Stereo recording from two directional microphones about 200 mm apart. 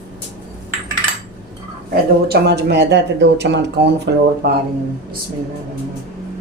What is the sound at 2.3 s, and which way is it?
Speech, 55° right (ahead or behind).